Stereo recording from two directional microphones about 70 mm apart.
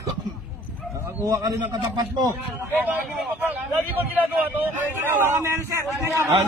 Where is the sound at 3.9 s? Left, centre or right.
Right.